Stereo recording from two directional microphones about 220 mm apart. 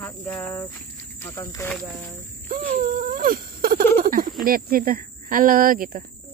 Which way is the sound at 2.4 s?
40° right (ahead or behind).